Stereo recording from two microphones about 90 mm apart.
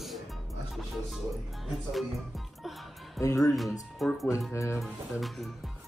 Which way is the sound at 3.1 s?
35° left (ahead or behind).